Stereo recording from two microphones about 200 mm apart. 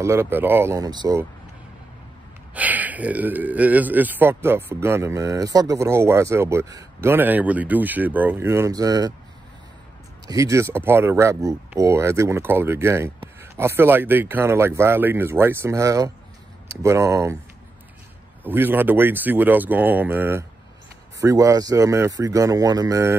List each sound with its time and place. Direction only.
0.0 s speech: 10° right (ahead or behind)
2.5 s speech: 10° right (ahead or behind)
10.2 s speech: 15° right (ahead or behind)
18.4 s speech: 10° right (ahead or behind)